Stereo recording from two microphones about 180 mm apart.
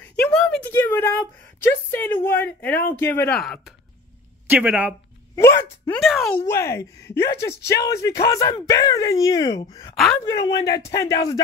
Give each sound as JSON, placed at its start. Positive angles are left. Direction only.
{"t": 0.3, "sound": "a sound", "side_deg": 5}
{"t": 2.9, "sound": "speech", "side_deg": 10}
{"t": 5.3, "sound": "speech", "side_deg": 15}
{"t": 5.9, "sound": "speech", "side_deg": 0}
{"t": 6.4, "sound": "speech", "side_deg": 15}
{"t": 9.9, "sound": "speech", "side_deg": 0}
{"t": 10.2, "sound": "speech", "side_deg": 20}